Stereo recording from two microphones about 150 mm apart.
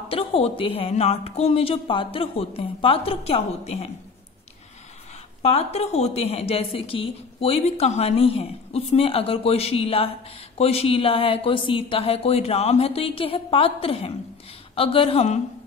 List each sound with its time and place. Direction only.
0.1 s a woman's voice: 40° left (ahead or behind)
5.4 s a woman's voice: 45° left (ahead or behind)